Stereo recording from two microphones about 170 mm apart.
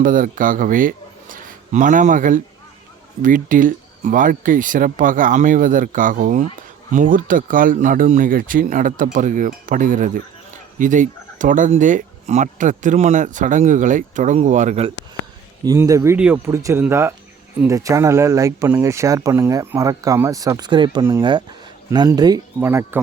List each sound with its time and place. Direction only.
0.0 s a man's voice: 50° right (ahead or behind)
15.6 s speech: 20° right (ahead or behind)